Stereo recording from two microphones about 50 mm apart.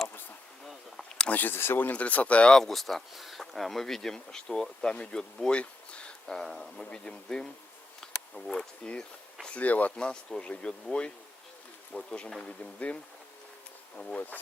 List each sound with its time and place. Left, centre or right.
0.7 s insect: centre
1.3 s speech: left
1.5 s speech: left
1.8 s speech: left
2.5 s speech: centre
6.3 s speech: centre
9.5 s speech: left
9.9 s speech: centre
11.9 s speech: left